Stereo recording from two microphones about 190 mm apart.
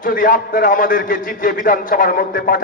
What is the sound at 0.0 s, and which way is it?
A man's voice, 45° left (ahead or behind).